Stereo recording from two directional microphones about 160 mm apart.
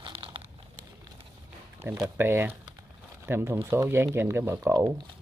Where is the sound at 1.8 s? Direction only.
15° right (ahead or behind).